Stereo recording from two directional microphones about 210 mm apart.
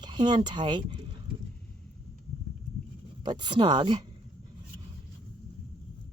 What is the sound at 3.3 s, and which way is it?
Speech, 20° right (ahead or behind).